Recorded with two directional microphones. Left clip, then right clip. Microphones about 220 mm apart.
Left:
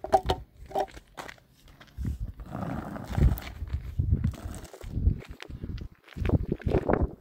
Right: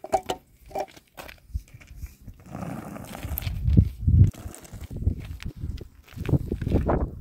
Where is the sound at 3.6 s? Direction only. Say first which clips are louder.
Right 14 dB; 40° right (ahead or behind).